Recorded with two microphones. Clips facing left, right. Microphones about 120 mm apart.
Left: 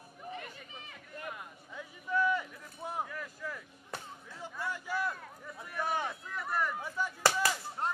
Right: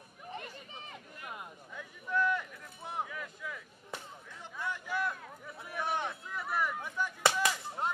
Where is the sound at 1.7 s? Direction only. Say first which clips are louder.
Left 1 dB; 5° left (ahead or behind).